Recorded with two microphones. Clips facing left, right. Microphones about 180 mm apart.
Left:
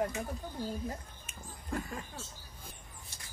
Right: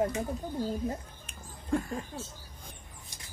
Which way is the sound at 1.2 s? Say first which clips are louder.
Right 4 dB; centre (ahead or behind).